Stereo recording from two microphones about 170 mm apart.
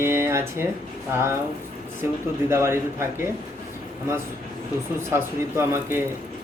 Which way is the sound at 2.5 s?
15° right (ahead or behind).